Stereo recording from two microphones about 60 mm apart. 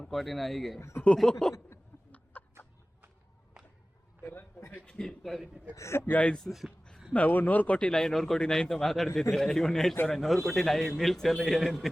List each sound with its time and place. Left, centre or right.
0.0 s a man's voice: centre
1.0 s a man's voice: centre
1.9 s a sound: left
2.3 s chicken: left
4.2 s a sound: left
4.9 s a man's voice: centre
5.7 s a man's voice: left
6.1 s a man's voice: centre
6.5 s a man's voice: centre
7.1 s speech: left
7.8 s a man's voice: centre